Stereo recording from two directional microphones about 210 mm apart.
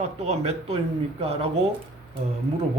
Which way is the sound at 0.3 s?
30° right (ahead or behind).